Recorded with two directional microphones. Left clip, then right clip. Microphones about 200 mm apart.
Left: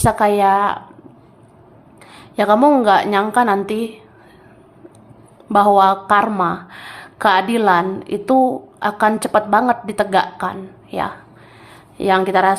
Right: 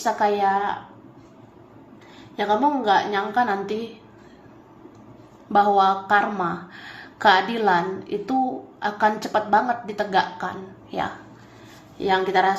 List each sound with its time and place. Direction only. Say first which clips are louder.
0.0 s a woman's voice: left 6 dB; 25° left (ahead or behind)
2.3 s a woman's voice: left 8 dB; 35° left (ahead or behind)
5.5 s speech: left 6 dB; 25° left (ahead or behind)